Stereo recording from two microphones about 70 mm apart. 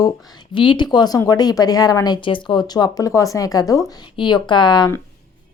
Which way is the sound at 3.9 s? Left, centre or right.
Left.